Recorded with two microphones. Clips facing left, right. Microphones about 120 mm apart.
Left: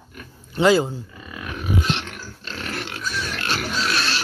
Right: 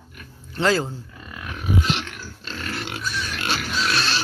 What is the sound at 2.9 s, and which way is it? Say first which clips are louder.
Pig: left 1 dB; 15° right (ahead or behind).